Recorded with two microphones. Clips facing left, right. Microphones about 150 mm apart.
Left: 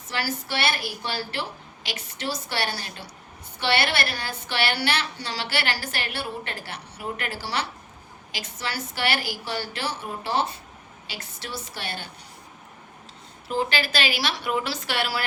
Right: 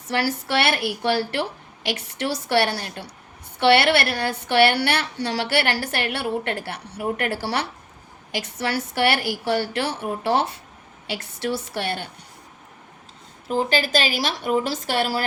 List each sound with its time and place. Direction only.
0.1 s a woman's voice: 65° right (ahead or behind)
13.5 s speech: 45° right (ahead or behind)